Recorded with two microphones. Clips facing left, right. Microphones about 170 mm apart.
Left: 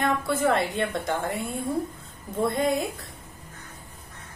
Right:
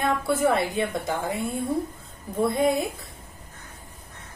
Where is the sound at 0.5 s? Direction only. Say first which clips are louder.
Right 1 dB; 5° right (ahead or behind).